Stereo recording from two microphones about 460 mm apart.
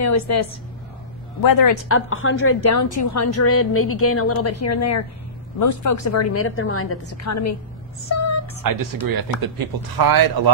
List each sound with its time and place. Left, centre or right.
0.0 s a woman's voice: left
1.9 s a woman's voice: left
8.1 s a sound: left
8.6 s speech: right